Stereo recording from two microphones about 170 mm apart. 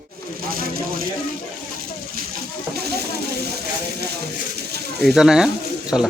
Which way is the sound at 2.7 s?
70° right (ahead or behind).